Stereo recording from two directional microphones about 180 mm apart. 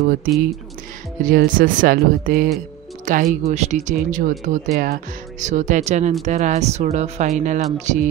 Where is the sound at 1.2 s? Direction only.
50° right (ahead or behind).